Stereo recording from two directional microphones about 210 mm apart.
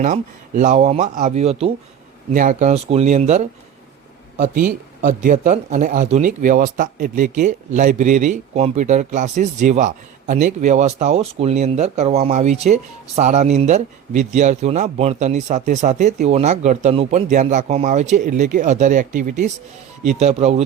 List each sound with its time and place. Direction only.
0.0 s speech: 35° right (ahead or behind)